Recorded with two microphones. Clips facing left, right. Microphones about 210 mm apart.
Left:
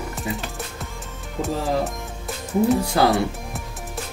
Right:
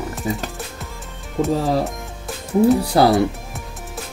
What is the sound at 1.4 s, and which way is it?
Music, centre (ahead or behind).